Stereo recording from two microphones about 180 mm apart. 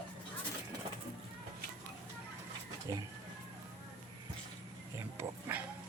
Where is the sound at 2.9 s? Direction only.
20° right (ahead or behind).